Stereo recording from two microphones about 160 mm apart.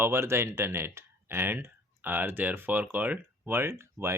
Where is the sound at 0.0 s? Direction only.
15° right (ahead or behind).